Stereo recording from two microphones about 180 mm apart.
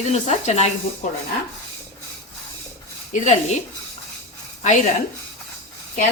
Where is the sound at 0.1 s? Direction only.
35° left (ahead or behind).